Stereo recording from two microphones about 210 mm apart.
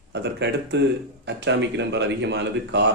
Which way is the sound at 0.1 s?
55° right (ahead or behind).